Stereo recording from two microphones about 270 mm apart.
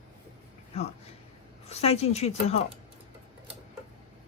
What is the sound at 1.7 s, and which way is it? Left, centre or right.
Speech, left.